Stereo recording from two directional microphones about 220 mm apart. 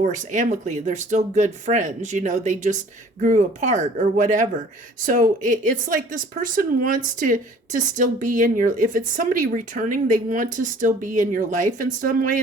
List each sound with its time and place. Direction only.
0.0 s speech: 35° right (ahead or behind)